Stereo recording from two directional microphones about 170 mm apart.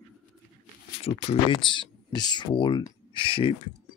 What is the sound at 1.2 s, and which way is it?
Speech, 35° left (ahead or behind).